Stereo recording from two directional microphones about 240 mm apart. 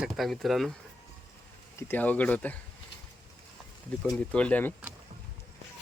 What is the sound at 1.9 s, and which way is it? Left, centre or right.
Speech, centre.